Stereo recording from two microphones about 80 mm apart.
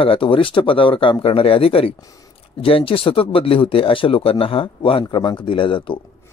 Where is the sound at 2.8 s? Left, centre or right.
Left.